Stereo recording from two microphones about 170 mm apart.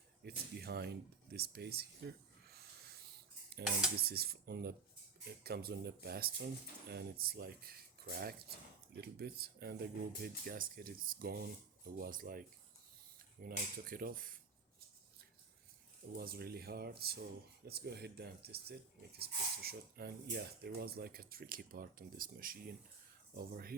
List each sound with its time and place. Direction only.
0.2 s speech: 70° right (ahead or behind)
16.1 s speech: 60° right (ahead or behind)